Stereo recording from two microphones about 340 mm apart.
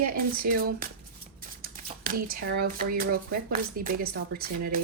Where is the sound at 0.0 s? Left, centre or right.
Right.